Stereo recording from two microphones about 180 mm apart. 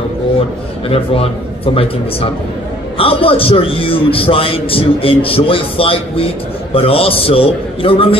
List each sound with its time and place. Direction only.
0.8 s a man's voice: 30° left (ahead or behind)